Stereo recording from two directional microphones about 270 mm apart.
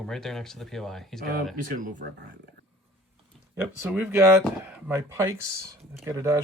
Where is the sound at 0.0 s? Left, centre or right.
Centre.